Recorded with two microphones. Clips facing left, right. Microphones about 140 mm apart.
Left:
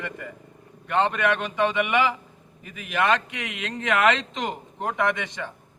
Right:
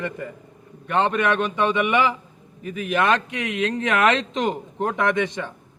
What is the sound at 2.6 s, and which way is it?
Speech, 35° right (ahead or behind).